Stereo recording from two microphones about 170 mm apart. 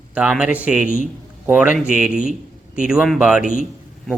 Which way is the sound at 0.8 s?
50° left (ahead or behind).